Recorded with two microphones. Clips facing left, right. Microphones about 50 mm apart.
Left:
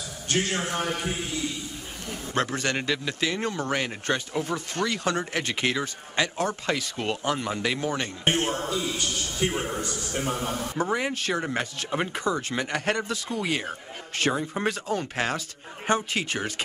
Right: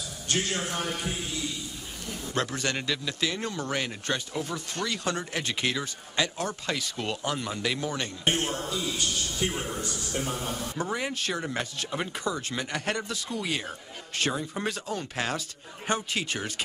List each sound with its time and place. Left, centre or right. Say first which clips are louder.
0.3 s a man's voice: left 3 dB; left